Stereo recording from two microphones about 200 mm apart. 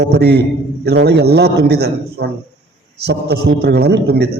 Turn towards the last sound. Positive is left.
turn(degrees=-55)  # may be behind; listen again after turning